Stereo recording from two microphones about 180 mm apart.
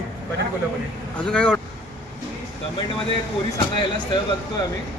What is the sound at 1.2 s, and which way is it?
Speech, 5° left (ahead or behind).